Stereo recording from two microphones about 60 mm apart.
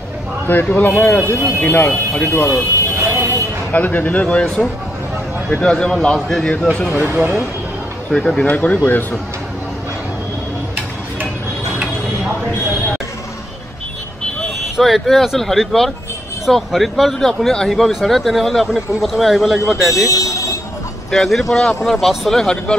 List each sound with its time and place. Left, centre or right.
0.5 s speech: left
2.2 s speech: left
3.0 s a sound: right
3.7 s speech: left; by 6.4 s centre
6.9 s speech: right
7.2 s speech: right
8.1 s speech: centre
14.8 s speech: centre
20.1 s a sound: left
21.1 s speech: centre
21.9 s speech: centre
22.4 s speech: centre